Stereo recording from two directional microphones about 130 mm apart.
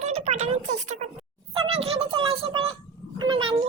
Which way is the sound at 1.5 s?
45° right (ahead or behind).